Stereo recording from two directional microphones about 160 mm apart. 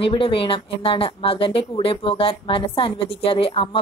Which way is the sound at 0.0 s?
35° left (ahead or behind).